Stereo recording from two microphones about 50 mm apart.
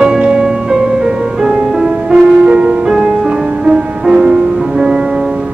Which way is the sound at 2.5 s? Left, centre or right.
Right.